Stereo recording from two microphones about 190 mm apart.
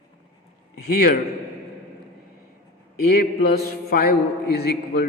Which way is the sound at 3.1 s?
55° left (ahead or behind).